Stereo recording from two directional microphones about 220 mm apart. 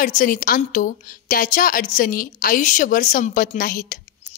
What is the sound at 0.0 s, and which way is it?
A woman's voice, 35° left (ahead or behind).